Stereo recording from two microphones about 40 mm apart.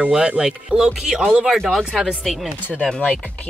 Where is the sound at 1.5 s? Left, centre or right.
Centre.